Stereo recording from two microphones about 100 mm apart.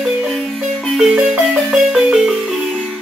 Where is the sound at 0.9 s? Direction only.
10° right (ahead or behind).